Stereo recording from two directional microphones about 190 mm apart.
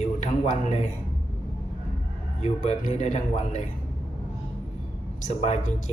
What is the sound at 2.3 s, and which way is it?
A man's voice, 40° left (ahead or behind).